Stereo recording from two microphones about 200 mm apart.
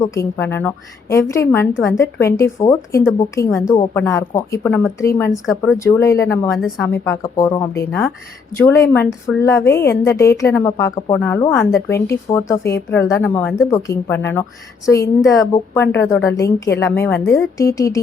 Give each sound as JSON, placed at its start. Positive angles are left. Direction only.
{"t": 0.0, "sound": "a woman's voice", "side_deg": 15}